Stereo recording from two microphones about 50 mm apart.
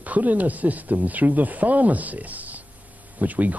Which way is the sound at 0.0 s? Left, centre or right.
Right.